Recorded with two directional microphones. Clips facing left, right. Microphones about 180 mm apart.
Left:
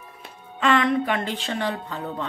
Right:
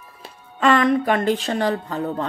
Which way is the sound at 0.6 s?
40° right (ahead or behind).